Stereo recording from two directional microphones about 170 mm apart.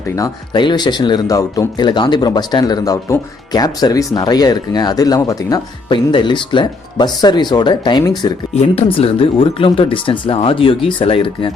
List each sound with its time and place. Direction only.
0.2 s speech: 25° left (ahead or behind)
8.5 s speech: 35° left (ahead or behind)